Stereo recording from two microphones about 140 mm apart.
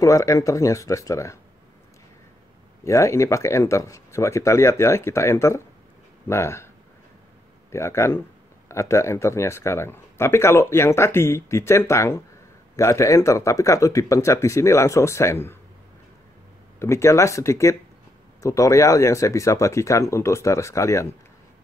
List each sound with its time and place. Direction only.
0.0 s speech: 20° left (ahead or behind)
2.8 s speech: 20° left (ahead or behind)
7.7 s speech: 20° left (ahead or behind)
16.8 s speech: 20° left (ahead or behind)